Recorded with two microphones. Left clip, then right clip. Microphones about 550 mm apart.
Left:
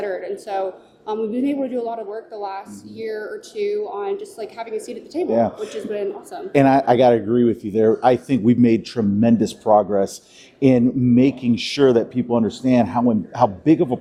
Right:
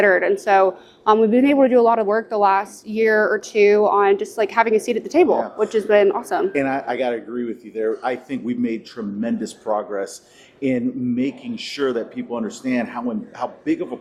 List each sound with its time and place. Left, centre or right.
0.0 s speech: right
6.6 s speech: left